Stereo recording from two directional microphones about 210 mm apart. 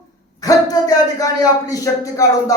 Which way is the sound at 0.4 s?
15° left (ahead or behind).